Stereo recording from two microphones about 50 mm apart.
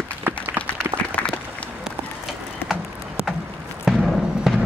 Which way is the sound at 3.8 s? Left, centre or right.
Centre.